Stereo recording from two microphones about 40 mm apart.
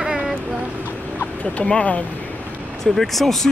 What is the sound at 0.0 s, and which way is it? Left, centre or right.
Vehicle, right.